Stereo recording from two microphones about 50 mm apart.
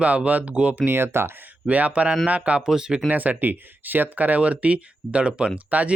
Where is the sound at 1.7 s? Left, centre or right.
Right.